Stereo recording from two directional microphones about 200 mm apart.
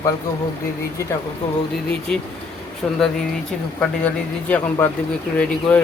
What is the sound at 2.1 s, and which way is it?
Speech, 5° left (ahead or behind).